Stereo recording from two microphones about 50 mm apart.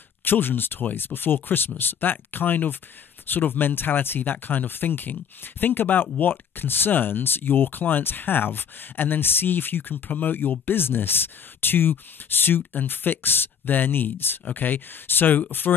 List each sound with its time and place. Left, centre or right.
0.2 s speech: left